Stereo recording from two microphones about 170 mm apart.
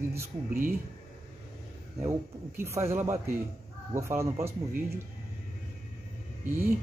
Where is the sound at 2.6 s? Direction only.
15° right (ahead or behind).